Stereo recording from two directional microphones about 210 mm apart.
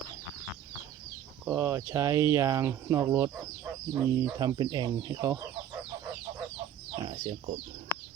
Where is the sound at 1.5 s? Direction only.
15° right (ahead or behind).